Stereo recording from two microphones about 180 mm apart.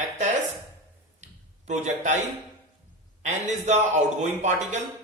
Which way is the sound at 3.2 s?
40° right (ahead or behind).